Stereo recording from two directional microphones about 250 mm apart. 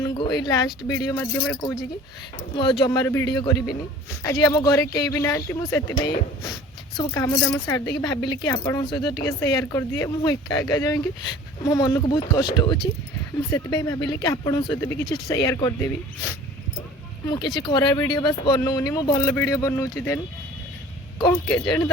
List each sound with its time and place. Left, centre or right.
0.0 s speech: centre
2.8 s speech: centre
6.9 s speech: centre
17.4 s speech: centre